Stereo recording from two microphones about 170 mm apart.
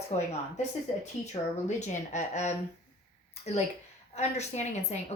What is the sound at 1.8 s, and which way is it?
Speech, 45° left (ahead or behind).